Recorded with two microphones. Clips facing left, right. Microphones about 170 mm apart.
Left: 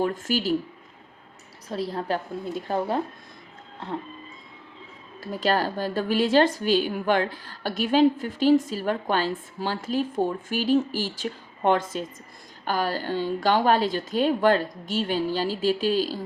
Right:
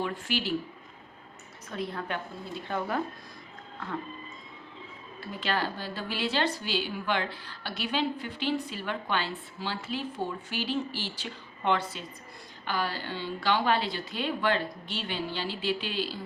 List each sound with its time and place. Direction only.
0.0 s speech: 45° left (ahead or behind)
1.7 s a woman's voice: 35° left (ahead or behind)
5.2 s speech: 40° left (ahead or behind)